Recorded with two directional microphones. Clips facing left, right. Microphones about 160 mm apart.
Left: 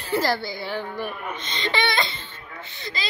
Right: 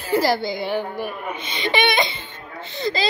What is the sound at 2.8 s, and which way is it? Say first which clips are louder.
Speech: right 12 dB; 35° right (ahead or behind).